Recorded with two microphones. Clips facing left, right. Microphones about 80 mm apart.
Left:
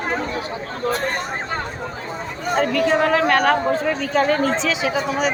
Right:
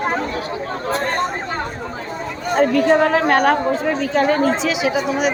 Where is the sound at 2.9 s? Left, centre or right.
Right.